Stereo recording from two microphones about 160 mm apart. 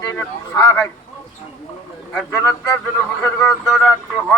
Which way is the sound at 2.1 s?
5° left (ahead or behind).